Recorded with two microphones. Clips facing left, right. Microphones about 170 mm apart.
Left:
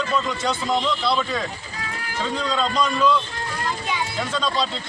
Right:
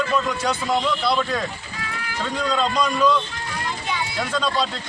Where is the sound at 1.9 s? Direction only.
40° left (ahead or behind).